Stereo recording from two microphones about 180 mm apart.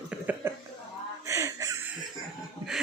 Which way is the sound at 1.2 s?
15° right (ahead or behind).